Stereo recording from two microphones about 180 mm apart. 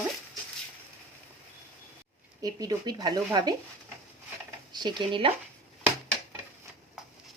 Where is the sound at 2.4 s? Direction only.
20° right (ahead or behind).